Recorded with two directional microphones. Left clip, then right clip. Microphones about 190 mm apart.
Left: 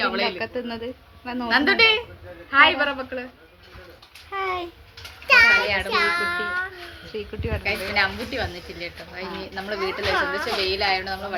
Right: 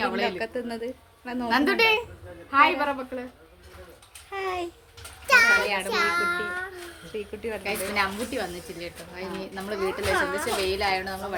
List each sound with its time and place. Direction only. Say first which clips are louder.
0.3 s a woman's voice: left 2 dB; 5° left (ahead or behind)
1.5 s a woman's voice: left 4 dB; 35° right (ahead or behind)
2.5 s a child's voice: left 4 dB; 25° right (ahead or behind)
4.3 s a woman's voice: left 4 dB; 5° left (ahead or behind)
5.3 s a child's voice: left 3 dB; 30° right (ahead or behind)
7.1 s speech: left 2 dB; 5° left (ahead or behind)
7.6 s a woman's voice: left 5 dB; 35° right (ahead or behind)
10.2 s a woman's voice: left 2 dB; 15° right (ahead or behind)
10.7 s a woman's voice: left 3 dB; 35° right (ahead or behind)